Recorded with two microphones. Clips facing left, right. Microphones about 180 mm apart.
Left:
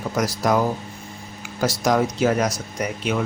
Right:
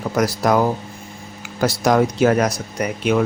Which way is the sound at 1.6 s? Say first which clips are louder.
Right 3 dB; 60° right (ahead or behind).